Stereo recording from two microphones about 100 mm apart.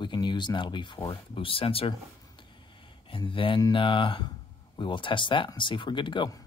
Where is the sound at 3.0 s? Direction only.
55° left (ahead or behind).